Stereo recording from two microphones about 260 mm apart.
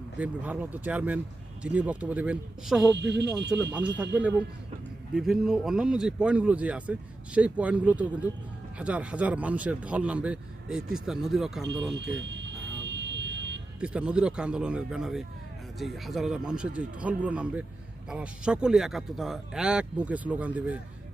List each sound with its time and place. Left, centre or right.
0.2 s speech: centre
2.9 s speech: right
3.7 s speech: centre
11.9 s vehicle: right
13.7 s speech: centre